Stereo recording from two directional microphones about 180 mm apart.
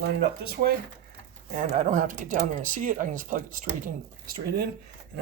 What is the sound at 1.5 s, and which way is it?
Speech, 45° right (ahead or behind).